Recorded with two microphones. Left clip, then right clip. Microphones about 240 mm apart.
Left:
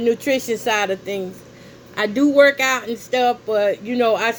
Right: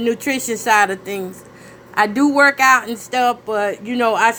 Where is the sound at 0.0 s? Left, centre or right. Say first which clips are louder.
Left 1 dB; right.